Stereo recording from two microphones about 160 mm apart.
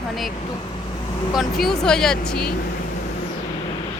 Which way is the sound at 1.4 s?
Centre (ahead or behind).